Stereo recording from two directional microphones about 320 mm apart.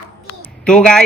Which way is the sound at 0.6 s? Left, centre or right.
Centre.